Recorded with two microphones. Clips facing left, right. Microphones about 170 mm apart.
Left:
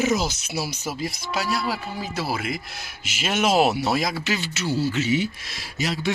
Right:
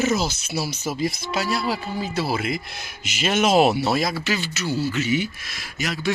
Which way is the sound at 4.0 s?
15° left (ahead or behind).